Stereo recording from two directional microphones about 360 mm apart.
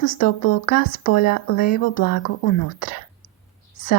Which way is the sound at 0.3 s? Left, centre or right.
Left.